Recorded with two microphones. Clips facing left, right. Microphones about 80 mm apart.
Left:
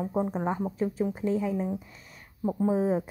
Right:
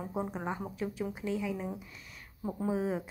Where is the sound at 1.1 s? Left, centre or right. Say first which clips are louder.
Left 7 dB; left.